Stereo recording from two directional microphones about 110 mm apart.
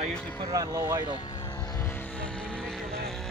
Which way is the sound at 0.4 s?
30° right (ahead or behind).